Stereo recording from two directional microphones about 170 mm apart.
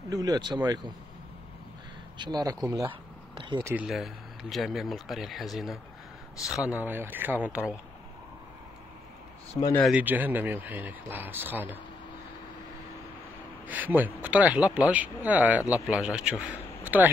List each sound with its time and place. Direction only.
0.1 s speech: 20° right (ahead or behind)
2.1 s speech: 25° right (ahead or behind)
3.6 s speech: 5° right (ahead or behind)
9.8 s speech: 10° right (ahead or behind)
13.7 s speech: 10° right (ahead or behind)